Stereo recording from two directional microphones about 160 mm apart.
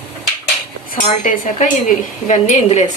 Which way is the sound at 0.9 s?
50° left (ahead or behind).